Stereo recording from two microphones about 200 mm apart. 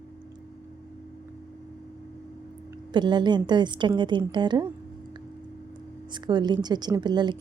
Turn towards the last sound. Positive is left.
turn(degrees=-20)  # may be behind; listen again after turning